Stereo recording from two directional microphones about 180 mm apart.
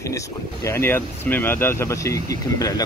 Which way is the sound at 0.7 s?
15° left (ahead or behind).